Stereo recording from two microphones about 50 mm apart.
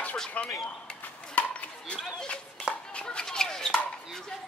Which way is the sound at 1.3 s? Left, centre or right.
Left.